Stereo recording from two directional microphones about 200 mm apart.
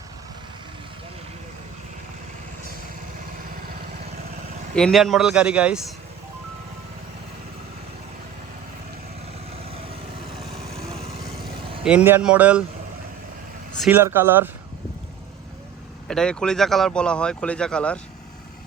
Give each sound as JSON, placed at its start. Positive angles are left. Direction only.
{"t": 4.7, "sound": "speech", "side_deg": 0}
{"t": 10.8, "sound": "lawn mower", "side_deg": -30}
{"t": 11.8, "sound": "speech", "side_deg": -5}
{"t": 13.9, "sound": "speech", "side_deg": -10}
{"t": 16.0, "sound": "speech", "side_deg": 5}